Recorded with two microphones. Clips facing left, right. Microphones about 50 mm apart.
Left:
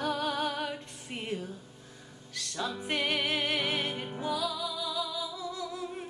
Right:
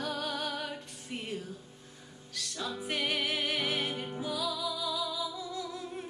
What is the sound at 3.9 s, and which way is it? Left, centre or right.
Music, centre.